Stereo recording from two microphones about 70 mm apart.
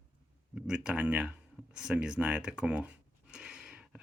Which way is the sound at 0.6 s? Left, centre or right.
Centre.